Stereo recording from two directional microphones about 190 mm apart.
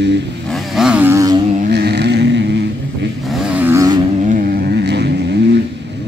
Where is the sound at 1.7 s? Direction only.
60° right (ahead or behind).